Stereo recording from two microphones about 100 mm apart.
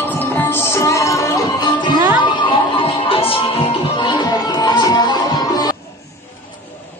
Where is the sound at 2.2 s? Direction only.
50° left (ahead or behind).